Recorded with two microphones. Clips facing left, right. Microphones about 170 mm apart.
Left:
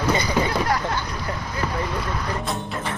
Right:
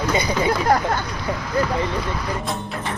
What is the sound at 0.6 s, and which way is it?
Speech, 50° right (ahead or behind).